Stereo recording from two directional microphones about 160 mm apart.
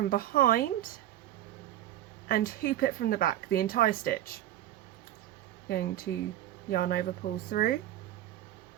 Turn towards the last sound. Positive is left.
turn(degrees=65)  # may be behind; listen again after turning